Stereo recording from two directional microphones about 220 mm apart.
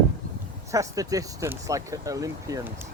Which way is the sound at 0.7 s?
15° right (ahead or behind).